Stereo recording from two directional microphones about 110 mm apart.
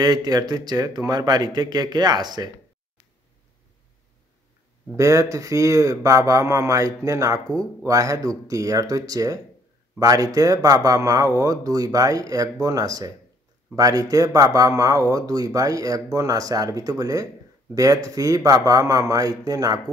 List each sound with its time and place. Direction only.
0.0 s speech: 35° right (ahead or behind)
4.9 s speech: 30° right (ahead or behind)